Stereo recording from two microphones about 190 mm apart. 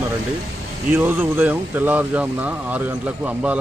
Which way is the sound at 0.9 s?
10° right (ahead or behind).